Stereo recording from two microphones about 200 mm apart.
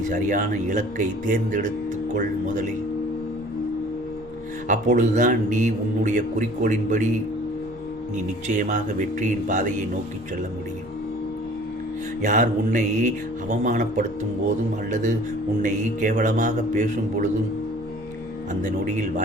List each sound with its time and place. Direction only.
0.1 s a man's voice: 40° right (ahead or behind)
4.7 s a man's voice: 40° right (ahead or behind)
8.4 s a man's voice: 40° right (ahead or behind)
12.2 s a man's voice: 40° right (ahead or behind)
15.6 s a man's voice: 40° right (ahead or behind)